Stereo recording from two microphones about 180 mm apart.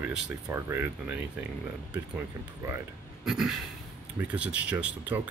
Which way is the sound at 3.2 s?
5° right (ahead or behind).